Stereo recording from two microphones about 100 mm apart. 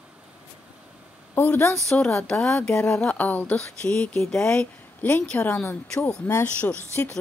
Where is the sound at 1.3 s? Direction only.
20° left (ahead or behind).